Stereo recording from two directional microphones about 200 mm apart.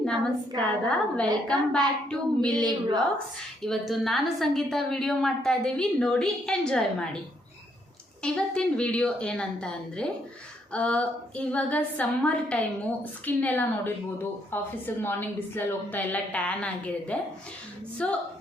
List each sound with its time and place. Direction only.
0.0 s a woman's voice: centre (ahead or behind)
2.6 s a woman's voice: 20° right (ahead or behind)
3.6 s a woman's voice: centre (ahead or behind)
8.2 s a woman's voice: 5° left (ahead or behind)